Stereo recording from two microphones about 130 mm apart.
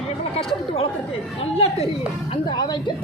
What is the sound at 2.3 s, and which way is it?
Speech, 35° left (ahead or behind).